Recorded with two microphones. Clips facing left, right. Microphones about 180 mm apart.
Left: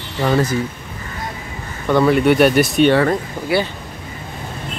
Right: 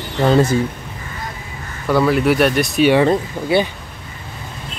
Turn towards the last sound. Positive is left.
turn(degrees=-20)  # may be behind; listen again after turning